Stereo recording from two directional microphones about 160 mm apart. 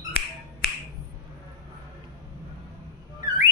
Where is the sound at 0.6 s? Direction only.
90° left.